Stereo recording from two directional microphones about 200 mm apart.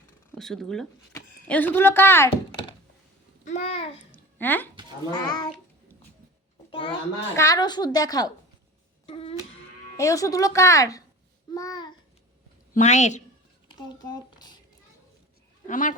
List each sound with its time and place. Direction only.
0.3 s speech: centre (ahead or behind)
3.4 s a woman's voice: 35° left (ahead or behind)
4.1 s a sound: 10° left (ahead or behind)
6.7 s a woman's voice: 25° left (ahead or behind)
9.0 s a sound: 25° left (ahead or behind)
10.0 s speech: 15° left (ahead or behind)
11.5 s babbling: 20° left (ahead or behind)
12.7 s a woman's voice: 35° left (ahead or behind)
13.7 s speech: 20° left (ahead or behind)
15.6 s a woman's voice: 40° left (ahead or behind)